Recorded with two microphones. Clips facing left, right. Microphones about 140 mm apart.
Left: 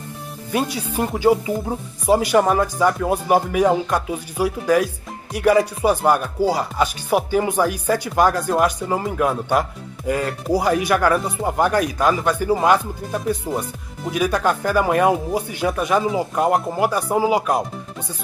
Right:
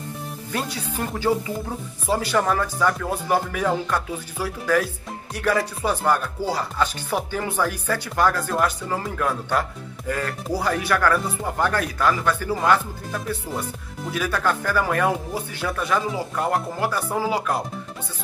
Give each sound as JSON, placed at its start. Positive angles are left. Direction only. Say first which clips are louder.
{"t": 0.5, "sound": "speech", "louder": "left 7 dB", "side_deg": 10}